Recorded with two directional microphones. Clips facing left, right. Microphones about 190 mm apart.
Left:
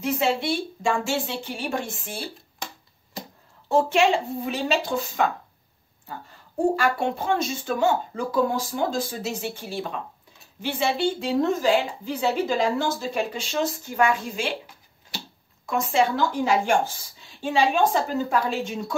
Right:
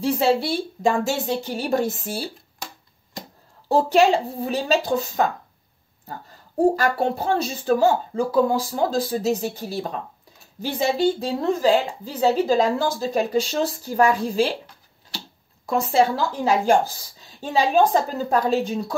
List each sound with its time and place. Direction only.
0.0 s a woman's voice: 35° right (ahead or behind)
3.6 s a woman's voice: 35° right (ahead or behind)
6.6 s a woman's voice: 35° right (ahead or behind)
15.6 s a woman's voice: 35° right (ahead or behind)